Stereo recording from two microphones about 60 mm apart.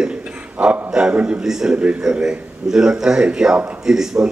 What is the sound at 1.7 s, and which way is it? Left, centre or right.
Speech, centre.